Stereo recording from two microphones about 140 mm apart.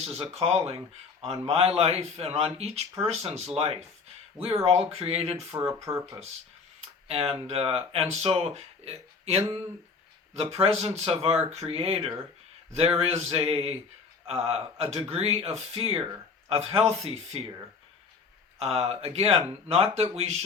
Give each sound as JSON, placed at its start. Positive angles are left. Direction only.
{"t": 0.0, "sound": "speech", "side_deg": -50}
{"t": 6.8, "sound": "a sound", "side_deg": -45}
{"t": 7.4, "sound": "speech", "side_deg": -45}
{"t": 18.6, "sound": "speech", "side_deg": -45}